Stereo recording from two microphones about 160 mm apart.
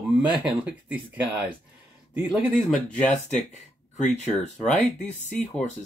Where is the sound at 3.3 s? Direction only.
50° left (ahead or behind).